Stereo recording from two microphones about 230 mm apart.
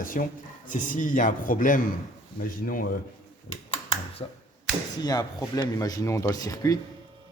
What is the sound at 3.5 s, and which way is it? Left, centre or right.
Typing, left.